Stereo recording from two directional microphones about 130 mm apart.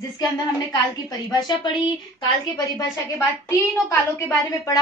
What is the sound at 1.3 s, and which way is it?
A woman's voice, 35° left (ahead or behind).